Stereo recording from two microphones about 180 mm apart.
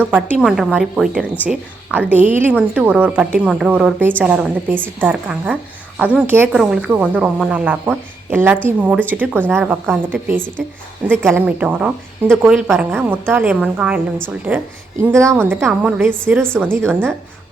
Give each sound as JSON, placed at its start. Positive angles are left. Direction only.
{"t": 0.0, "sound": "a woman's voice", "side_deg": -5}